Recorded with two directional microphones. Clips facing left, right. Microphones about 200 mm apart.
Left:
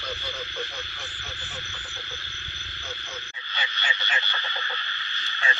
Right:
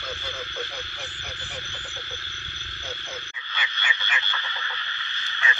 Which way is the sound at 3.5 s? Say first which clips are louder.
Even; 30° left (ahead or behind).